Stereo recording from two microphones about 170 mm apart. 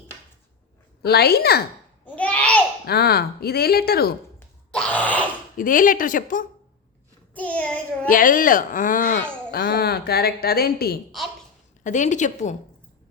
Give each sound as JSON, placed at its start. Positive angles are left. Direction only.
{"t": 1.0, "sound": "speech", "side_deg": 70}
{"t": 2.0, "sound": "babbling", "side_deg": 10}
{"t": 2.8, "sound": "speech", "side_deg": 70}
{"t": 4.4, "sound": "a sound", "side_deg": 5}
{"t": 5.5, "sound": "speech", "side_deg": 55}
{"t": 7.3, "sound": "child singing", "side_deg": 10}
{"t": 8.0, "sound": "speech", "side_deg": 55}
{"t": 11.8, "sound": "speech", "side_deg": 45}